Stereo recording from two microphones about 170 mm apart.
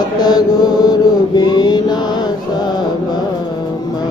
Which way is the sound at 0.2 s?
25° left (ahead or behind).